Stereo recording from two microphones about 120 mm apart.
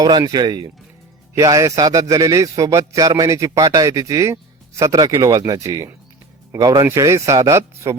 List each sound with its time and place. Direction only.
0.0 s a man's voice: 35° right (ahead or behind)